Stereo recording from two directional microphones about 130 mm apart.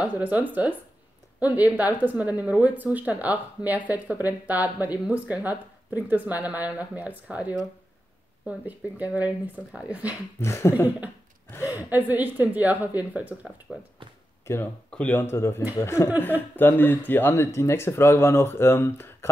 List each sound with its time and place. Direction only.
0.0 s a woman's voice: 10° right (ahead or behind)
10.4 s a woman's voice: 20° left (ahead or behind)
11.9 s a woman's voice: 15° right (ahead or behind)
13.7 s speech: centre (ahead or behind)
14.4 s a sound: 20° left (ahead or behind)
14.9 s speech: 10° left (ahead or behind)